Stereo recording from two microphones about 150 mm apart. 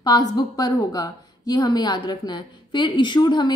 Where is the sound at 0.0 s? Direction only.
25° left (ahead or behind).